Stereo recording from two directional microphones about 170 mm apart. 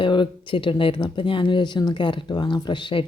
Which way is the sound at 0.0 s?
30° left (ahead or behind).